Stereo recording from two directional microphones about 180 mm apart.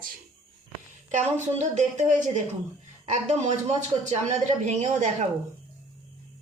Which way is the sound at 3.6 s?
40° right (ahead or behind).